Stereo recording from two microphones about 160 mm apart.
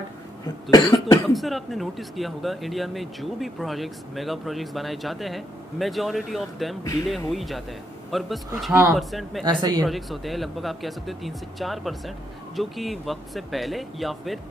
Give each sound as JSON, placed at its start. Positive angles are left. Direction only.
{"t": 0.7, "sound": "cough", "side_deg": 25}
{"t": 1.3, "sound": "speech", "side_deg": 0}
{"t": 9.4, "sound": "speech", "side_deg": -30}
{"t": 9.8, "sound": "speech", "side_deg": 0}